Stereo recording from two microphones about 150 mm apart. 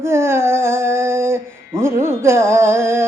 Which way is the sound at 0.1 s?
15° right (ahead or behind).